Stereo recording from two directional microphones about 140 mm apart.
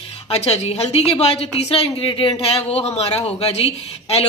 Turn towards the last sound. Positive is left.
turn(degrees=45)  # may be behind; listen again after turning